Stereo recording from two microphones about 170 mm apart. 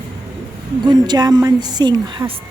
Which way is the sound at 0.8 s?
25° right (ahead or behind).